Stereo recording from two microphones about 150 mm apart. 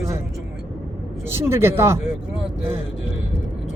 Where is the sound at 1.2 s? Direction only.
15° right (ahead or behind).